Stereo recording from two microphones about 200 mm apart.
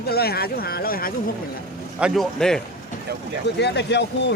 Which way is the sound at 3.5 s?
60° left (ahead or behind).